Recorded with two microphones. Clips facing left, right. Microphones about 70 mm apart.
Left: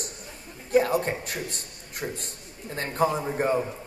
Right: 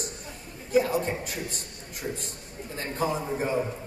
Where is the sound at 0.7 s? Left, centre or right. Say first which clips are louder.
Left 2 dB; left.